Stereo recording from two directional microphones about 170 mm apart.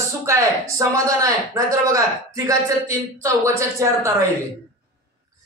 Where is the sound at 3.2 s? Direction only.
15° right (ahead or behind).